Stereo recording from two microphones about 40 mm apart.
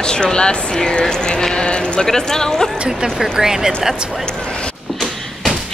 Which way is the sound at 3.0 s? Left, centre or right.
Centre.